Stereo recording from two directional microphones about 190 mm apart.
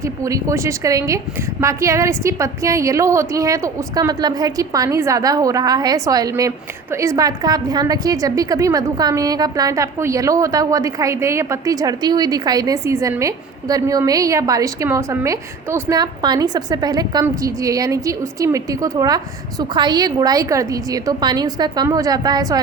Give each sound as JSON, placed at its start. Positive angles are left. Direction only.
{"t": 0.0, "sound": "a woman's voice", "side_deg": -15}